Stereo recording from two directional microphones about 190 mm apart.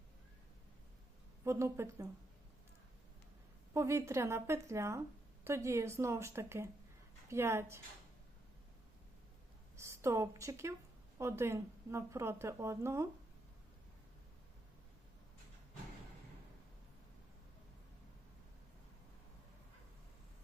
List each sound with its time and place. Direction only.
1.5 s a woman's voice: 15° right (ahead or behind)
3.8 s a woman's voice: 15° right (ahead or behind)
9.7 s a woman's voice: 15° right (ahead or behind)